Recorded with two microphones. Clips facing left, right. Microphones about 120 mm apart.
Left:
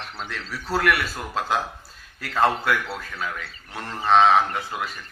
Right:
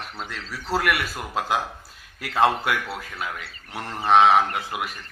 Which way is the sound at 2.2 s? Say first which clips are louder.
Right 1 dB; 15° right (ahead or behind).